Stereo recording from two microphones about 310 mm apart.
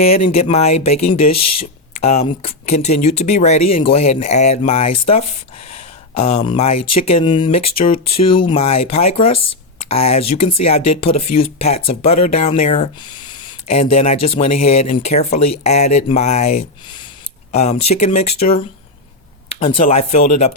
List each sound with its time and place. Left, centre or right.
0.3 s speech: centre
1.3 s speech: left
2.0 s speech: centre
5.7 s a sound: centre
6.7 s speech: left
7.0 s speech: centre
17.5 s speech: left